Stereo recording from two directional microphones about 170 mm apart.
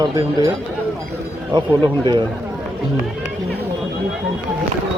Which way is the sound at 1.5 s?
25° right (ahead or behind).